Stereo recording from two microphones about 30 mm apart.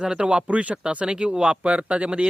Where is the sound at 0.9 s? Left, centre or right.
Right.